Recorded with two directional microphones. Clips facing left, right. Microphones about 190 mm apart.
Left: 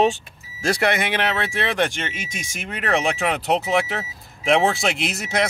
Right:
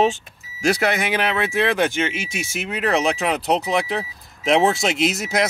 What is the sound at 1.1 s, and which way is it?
Speech, 5° right (ahead or behind).